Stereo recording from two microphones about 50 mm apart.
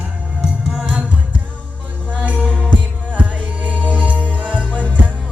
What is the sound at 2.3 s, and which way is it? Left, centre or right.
Music, left.